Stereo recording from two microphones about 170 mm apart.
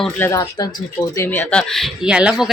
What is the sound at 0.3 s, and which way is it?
Speech, 20° left (ahead or behind).